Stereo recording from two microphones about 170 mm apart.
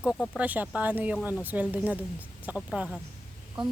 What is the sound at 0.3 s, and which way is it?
A woman's voice, 10° right (ahead or behind).